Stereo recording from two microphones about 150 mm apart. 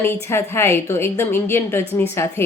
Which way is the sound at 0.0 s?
15° left (ahead or behind).